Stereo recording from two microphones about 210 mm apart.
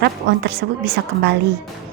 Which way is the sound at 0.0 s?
55° right (ahead or behind).